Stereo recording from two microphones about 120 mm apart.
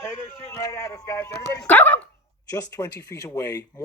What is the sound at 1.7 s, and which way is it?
Speech, 15° left (ahead or behind).